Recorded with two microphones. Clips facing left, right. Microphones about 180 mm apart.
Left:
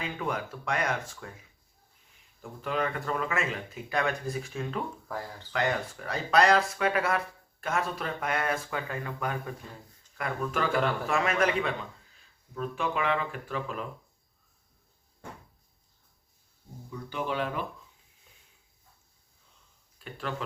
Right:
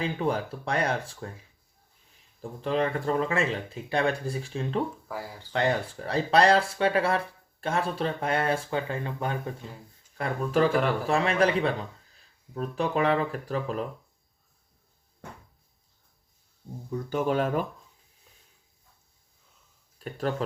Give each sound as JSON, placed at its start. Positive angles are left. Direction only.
{"t": 0.0, "sound": "speech", "side_deg": -30}
{"t": 5.0, "sound": "speech", "side_deg": -10}
{"t": 5.5, "sound": "speech", "side_deg": -30}
{"t": 16.9, "sound": "speech", "side_deg": -45}
{"t": 20.0, "sound": "speech", "side_deg": -40}